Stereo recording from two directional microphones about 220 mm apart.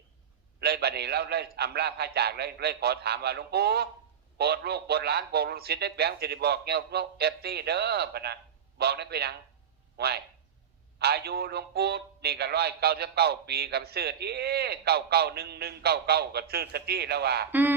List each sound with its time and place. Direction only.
0.6 s a man's voice: 45° right (ahead or behind)
17.5 s speech: 10° right (ahead or behind)